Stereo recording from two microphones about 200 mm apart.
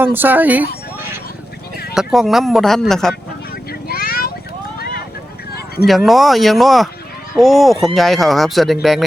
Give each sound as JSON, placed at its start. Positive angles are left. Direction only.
{"t": 0.0, "sound": "speech", "side_deg": -10}
{"t": 2.0, "sound": "speech", "side_deg": 0}
{"t": 3.7, "sound": "vehicle", "side_deg": 50}
{"t": 5.8, "sound": "speech", "side_deg": 0}